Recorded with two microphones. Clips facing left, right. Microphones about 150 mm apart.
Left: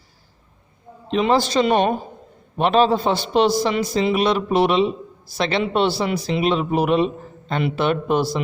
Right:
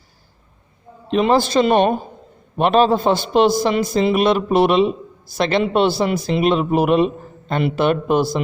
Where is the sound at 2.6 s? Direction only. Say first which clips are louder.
Right 2 dB; 50° right (ahead or behind).